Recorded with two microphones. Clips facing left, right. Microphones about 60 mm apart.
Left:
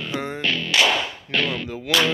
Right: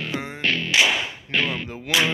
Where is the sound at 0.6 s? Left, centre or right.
Centre.